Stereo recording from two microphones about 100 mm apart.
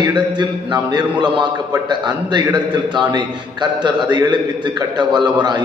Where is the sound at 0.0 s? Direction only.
50° right (ahead or behind).